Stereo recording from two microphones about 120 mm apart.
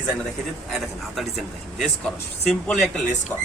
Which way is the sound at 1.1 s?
Centre (ahead or behind).